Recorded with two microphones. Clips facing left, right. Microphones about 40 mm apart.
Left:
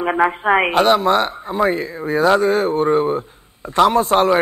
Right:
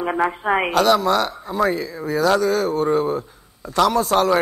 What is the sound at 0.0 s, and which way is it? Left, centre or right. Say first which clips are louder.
Speech: left 4 dB; left.